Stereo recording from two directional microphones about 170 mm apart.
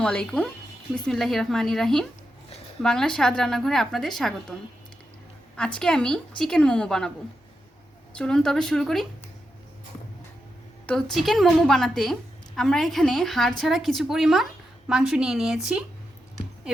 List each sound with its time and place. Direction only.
0.0 s a woman's voice: 5° left (ahead or behind)
5.5 s a woman's voice: 5° left (ahead or behind)
8.1 s a woman's voice: 5° left (ahead or behind)
10.8 s a woman's voice: 5° left (ahead or behind)